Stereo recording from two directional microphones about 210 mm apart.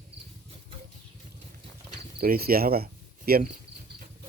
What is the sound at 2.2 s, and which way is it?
Cricket, 45° right (ahead or behind).